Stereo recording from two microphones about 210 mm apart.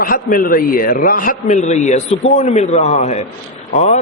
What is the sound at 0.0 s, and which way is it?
A man's voice, 40° left (ahead or behind).